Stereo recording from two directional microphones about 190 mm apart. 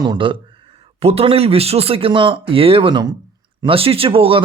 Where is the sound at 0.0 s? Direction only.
25° right (ahead or behind).